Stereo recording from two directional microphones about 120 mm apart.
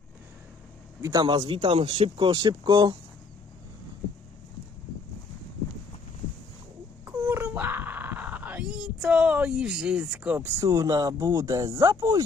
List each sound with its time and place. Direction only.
1.0 s speech: 35° right (ahead or behind)
7.0 s wail: 20° right (ahead or behind)
10.7 s speech: 30° right (ahead or behind)